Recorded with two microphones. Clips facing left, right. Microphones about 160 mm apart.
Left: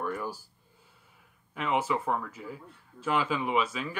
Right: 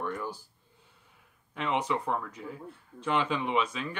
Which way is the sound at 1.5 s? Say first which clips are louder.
Left 1 dB; 5° left (ahead or behind).